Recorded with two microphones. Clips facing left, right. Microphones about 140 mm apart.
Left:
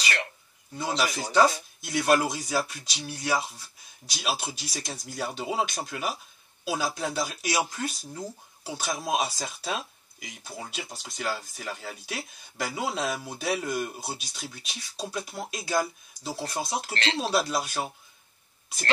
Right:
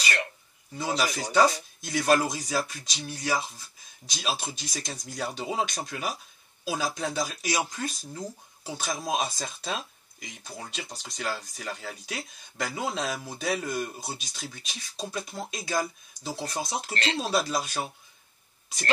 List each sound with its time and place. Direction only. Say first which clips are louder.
0.7 s speech: even; centre (ahead or behind)
16.9 s speech: right 2 dB; 25° left (ahead or behind)
17.2 s speech: left 2 dB; centre (ahead or behind)